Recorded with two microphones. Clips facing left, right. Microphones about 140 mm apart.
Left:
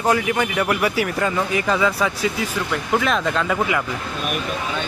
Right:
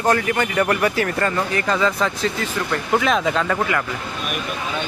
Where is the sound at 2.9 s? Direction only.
Centre (ahead or behind).